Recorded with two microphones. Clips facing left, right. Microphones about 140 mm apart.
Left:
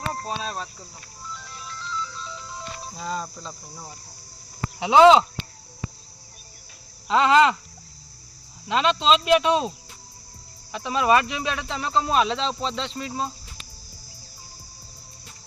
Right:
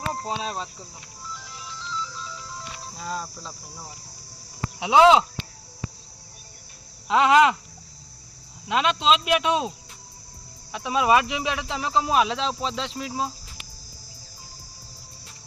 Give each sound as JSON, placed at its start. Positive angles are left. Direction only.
{"t": 0.1, "sound": "speech", "side_deg": -15}
{"t": 1.5, "sound": "music", "side_deg": -15}
{"t": 2.2, "sound": "cricket", "side_deg": -5}
{"t": 4.8, "sound": "speech", "side_deg": -5}
{"t": 7.1, "sound": "speech", "side_deg": -10}
{"t": 8.6, "sound": "speech", "side_deg": -5}